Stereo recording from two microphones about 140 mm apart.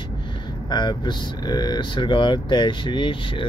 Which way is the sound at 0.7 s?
30° left (ahead or behind).